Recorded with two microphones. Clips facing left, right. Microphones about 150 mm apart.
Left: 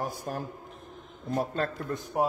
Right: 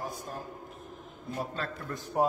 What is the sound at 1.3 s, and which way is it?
Speech, 45° left (ahead or behind).